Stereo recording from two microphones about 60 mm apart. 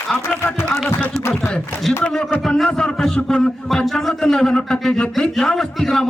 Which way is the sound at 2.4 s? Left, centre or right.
Centre.